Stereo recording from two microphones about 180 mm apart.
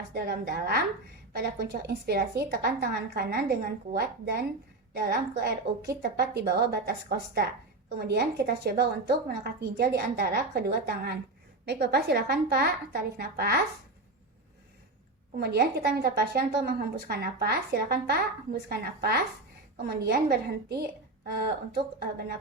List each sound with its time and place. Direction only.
0.1 s a woman's voice: 60° right (ahead or behind)
15.4 s a woman's voice: 60° right (ahead or behind)